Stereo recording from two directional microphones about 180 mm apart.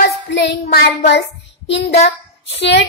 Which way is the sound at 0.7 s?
65° left (ahead or behind).